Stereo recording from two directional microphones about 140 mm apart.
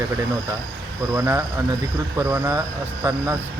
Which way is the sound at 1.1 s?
20° right (ahead or behind).